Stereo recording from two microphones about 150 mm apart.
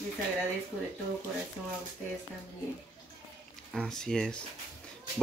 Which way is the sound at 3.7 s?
5° left (ahead or behind).